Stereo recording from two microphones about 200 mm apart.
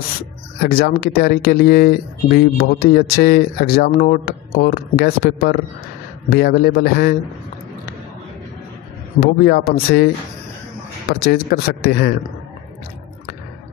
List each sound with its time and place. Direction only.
0.6 s speech: 50° left (ahead or behind)
9.2 s speech: 50° left (ahead or behind)